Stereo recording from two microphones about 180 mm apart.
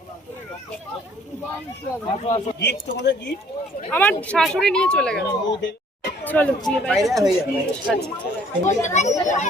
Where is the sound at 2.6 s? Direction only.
70° left (ahead or behind).